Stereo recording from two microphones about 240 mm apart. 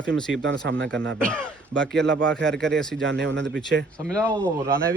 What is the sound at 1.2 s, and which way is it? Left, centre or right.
Speech, centre.